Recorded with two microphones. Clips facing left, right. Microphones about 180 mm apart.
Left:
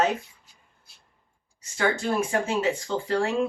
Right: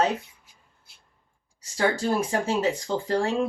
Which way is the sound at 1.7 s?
35° right (ahead or behind).